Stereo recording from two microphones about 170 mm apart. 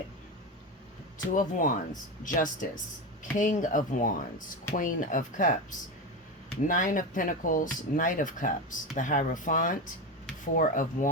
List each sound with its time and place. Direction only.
1.4 s speech: 50° left (ahead or behind)
6.7 s speech: 50° left (ahead or behind)